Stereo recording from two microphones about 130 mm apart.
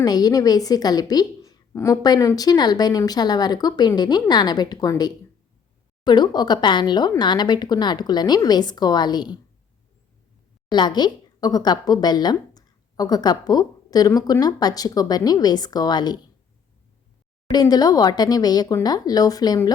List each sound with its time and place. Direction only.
0.0 s speech: 30° left (ahead or behind)
10.7 s speech: 35° left (ahead or behind)
17.5 s speech: 30° left (ahead or behind)